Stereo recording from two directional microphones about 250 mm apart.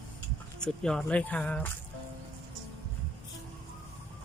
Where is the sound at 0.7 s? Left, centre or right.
Centre.